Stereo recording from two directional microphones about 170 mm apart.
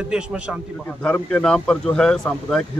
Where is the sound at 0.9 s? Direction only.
10° left (ahead or behind).